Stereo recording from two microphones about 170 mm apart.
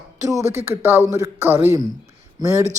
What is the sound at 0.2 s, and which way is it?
Speech, 20° right (ahead or behind).